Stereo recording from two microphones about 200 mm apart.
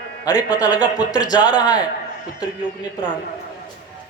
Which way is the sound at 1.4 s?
5° right (ahead or behind).